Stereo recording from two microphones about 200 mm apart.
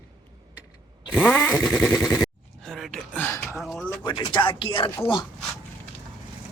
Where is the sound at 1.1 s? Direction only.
10° left (ahead or behind).